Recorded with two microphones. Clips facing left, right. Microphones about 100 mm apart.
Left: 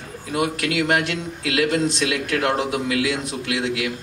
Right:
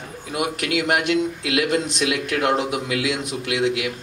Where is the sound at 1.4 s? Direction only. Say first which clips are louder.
Left 1 dB; 25° right (ahead or behind).